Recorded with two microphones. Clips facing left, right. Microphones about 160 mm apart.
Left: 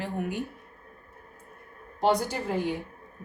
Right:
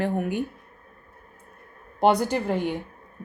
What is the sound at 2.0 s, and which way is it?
Speech, 60° right (ahead or behind).